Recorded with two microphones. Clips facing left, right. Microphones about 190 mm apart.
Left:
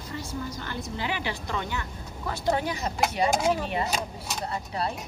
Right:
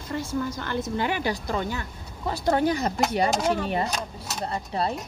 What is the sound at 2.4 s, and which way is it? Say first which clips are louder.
Speech: right 5 dB; 55° right (ahead or behind).